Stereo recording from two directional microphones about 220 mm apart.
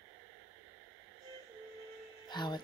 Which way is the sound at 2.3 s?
20° left (ahead or behind).